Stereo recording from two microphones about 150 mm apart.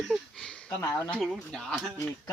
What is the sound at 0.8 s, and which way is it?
Speech, 25° left (ahead or behind).